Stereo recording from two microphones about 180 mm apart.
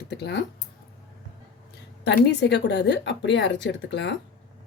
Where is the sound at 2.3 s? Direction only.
75° left (ahead or behind).